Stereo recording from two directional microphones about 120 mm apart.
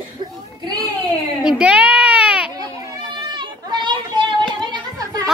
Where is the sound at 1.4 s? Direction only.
10° right (ahead or behind).